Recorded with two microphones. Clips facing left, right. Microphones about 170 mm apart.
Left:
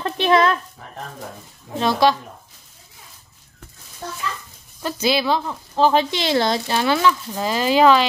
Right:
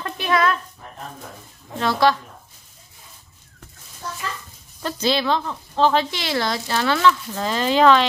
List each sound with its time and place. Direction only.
0.0 s a sound: 25° left (ahead or behind)
1.8 s speech: 15° left (ahead or behind)
4.8 s speech: 10° left (ahead or behind)